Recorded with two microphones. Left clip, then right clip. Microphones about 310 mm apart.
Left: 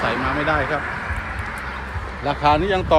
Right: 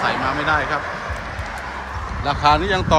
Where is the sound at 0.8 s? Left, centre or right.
Right.